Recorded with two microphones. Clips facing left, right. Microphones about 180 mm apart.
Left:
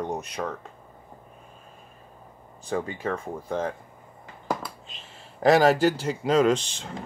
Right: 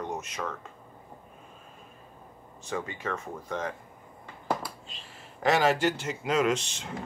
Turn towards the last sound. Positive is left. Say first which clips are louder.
# left 5 dB
turn(degrees=30)  # may be behind; listen again after turning